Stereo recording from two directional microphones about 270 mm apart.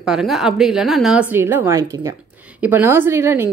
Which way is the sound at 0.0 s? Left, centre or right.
Centre.